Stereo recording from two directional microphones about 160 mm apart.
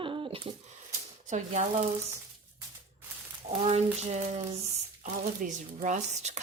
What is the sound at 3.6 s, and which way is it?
Speech, 40° right (ahead or behind).